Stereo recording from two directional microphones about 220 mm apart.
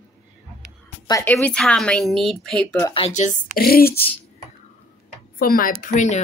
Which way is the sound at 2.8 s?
25° left (ahead or behind).